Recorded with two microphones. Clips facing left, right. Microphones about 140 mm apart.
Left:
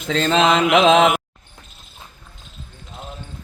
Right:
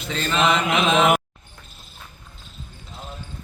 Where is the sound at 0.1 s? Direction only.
90° left.